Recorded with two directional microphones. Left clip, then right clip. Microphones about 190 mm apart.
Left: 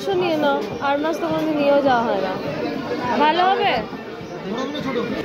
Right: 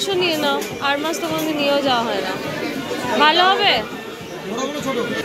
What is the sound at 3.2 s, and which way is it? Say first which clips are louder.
Speech: right 3 dB; 15° left (ahead or behind).